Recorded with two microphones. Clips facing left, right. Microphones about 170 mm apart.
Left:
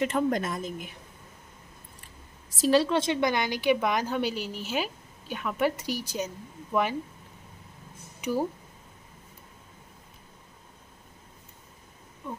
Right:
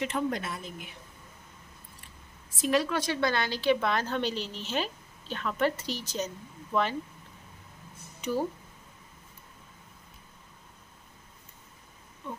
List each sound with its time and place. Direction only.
0.0 s a woman's voice: 45° left (ahead or behind)
2.6 s a woman's voice: 30° left (ahead or behind); by 7.0 s 10° left (ahead or behind)
8.2 s speech: 10° left (ahead or behind)